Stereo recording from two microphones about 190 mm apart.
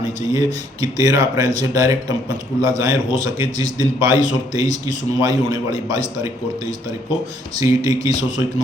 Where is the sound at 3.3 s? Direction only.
20° right (ahead or behind).